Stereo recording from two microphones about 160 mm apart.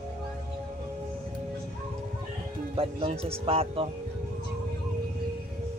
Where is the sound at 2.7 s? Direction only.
35° right (ahead or behind).